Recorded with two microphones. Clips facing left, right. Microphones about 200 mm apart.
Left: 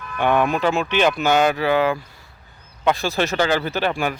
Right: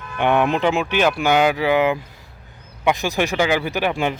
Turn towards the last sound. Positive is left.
turn(degrees=-20)  # may be behind; listen again after turning